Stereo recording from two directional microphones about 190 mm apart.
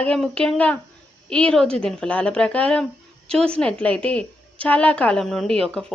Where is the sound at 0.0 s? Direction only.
5° left (ahead or behind).